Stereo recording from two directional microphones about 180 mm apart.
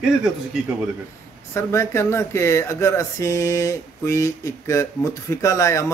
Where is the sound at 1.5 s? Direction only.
15° left (ahead or behind).